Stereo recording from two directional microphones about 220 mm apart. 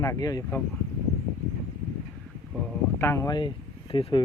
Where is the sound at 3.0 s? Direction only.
10° left (ahead or behind).